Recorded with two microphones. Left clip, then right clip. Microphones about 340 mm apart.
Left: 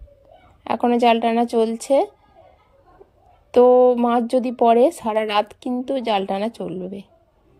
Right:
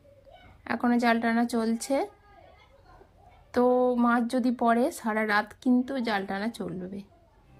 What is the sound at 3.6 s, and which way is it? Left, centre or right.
Speech, left.